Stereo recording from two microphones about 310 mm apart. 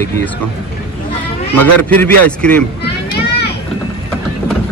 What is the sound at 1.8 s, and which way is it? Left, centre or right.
Speech, centre.